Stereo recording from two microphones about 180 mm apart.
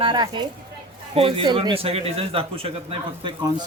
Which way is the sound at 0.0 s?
25° right (ahead or behind).